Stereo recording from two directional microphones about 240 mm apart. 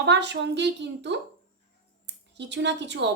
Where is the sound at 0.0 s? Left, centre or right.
Right.